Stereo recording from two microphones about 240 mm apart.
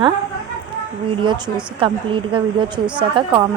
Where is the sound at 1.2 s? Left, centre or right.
Centre.